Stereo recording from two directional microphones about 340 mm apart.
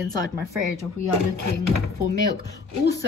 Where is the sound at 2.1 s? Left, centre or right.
Left.